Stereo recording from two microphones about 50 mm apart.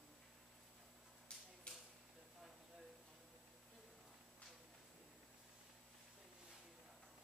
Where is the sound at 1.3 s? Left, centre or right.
Centre.